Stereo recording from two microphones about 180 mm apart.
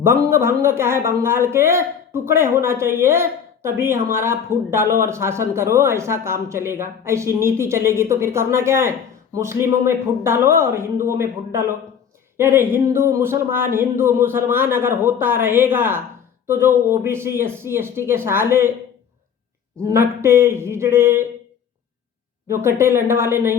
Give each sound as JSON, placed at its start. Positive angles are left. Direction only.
{"t": 0.0, "sound": "a man's voice", "side_deg": -15}
{"t": 19.9, "sound": "a man's voice", "side_deg": -15}
{"t": 22.4, "sound": "a man's voice", "side_deg": -15}